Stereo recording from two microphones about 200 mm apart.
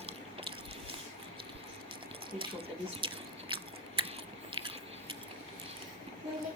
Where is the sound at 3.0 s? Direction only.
25° right (ahead or behind).